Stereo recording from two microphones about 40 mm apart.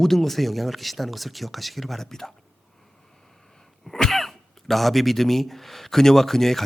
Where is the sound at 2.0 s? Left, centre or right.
Centre.